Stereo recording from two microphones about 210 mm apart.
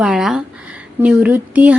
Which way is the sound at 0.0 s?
5° right (ahead or behind).